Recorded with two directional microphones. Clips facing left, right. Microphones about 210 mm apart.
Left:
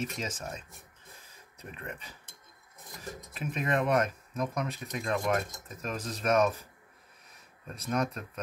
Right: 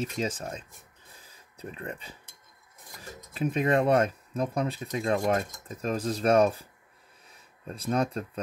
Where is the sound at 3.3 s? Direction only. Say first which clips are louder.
Right 6 dB; 30° right (ahead or behind).